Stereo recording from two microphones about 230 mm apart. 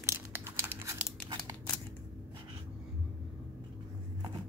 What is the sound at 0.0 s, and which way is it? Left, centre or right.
Crumpling, centre.